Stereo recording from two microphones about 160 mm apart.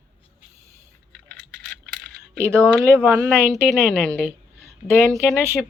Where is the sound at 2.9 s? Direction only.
15° right (ahead or behind).